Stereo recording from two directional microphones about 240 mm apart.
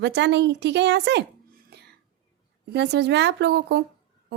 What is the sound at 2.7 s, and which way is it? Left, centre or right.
A woman's voice, right.